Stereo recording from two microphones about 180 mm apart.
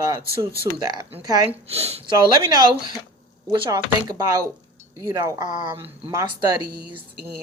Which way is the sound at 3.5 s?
25° right (ahead or behind).